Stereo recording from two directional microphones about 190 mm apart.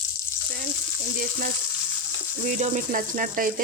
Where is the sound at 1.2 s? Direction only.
50° right (ahead or behind).